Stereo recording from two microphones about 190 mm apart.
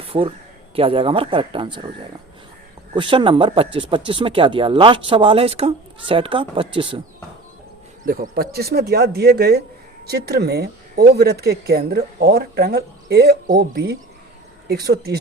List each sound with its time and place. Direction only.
0.1 s speech: 30° right (ahead or behind)
2.9 s speech: 25° right (ahead or behind)
8.0 s speech: 50° right (ahead or behind)